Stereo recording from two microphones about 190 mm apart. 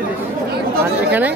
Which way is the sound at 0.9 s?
10° right (ahead or behind).